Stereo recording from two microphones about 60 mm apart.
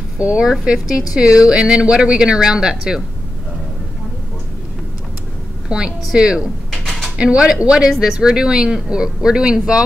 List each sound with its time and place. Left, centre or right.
0.2 s speech: centre
5.7 s speech: centre
6.7 s a sound: centre
7.2 s speech: centre